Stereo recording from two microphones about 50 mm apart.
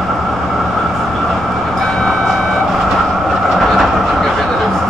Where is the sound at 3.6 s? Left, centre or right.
Centre.